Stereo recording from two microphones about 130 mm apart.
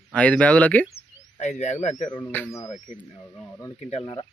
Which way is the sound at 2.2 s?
15° left (ahead or behind).